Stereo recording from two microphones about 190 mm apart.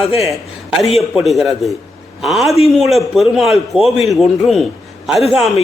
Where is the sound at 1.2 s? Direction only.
Centre (ahead or behind).